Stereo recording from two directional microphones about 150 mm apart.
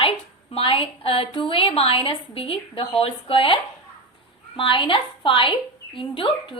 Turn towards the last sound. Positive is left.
turn(degrees=35)  # may be behind; listen again after turning